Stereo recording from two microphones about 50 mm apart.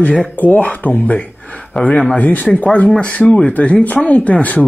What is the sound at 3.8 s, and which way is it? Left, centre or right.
Speech, left.